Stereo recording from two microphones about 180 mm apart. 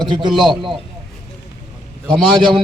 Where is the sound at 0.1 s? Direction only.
25° right (ahead or behind).